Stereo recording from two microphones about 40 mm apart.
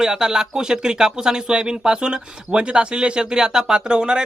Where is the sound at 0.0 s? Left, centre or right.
Centre.